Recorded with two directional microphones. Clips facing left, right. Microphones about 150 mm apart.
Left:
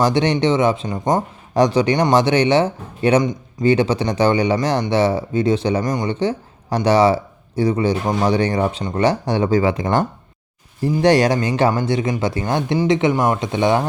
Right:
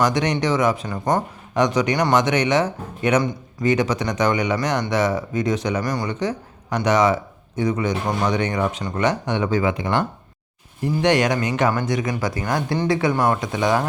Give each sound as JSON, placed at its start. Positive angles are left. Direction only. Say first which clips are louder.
{"t": 0.0, "sound": "speech", "louder": "left 4 dB", "side_deg": 30}
{"t": 1.5, "sound": "speech", "louder": "left 4 dB", "side_deg": 30}